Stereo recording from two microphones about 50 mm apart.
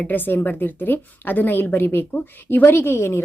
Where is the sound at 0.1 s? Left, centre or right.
Left.